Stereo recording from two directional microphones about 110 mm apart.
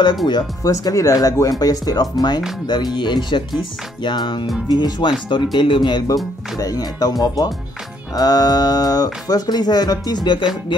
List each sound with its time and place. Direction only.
0.7 s speech: 30° left (ahead or behind)